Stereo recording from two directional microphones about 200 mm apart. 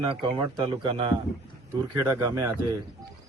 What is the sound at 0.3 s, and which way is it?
A man's voice, 20° right (ahead or behind).